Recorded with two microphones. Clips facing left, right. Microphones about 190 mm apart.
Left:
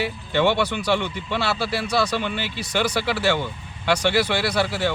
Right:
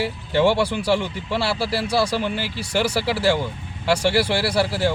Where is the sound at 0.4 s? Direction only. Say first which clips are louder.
Right 2 dB; 10° right (ahead or behind).